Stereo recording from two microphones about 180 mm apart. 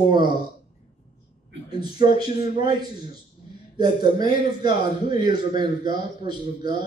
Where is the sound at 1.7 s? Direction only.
25° right (ahead or behind).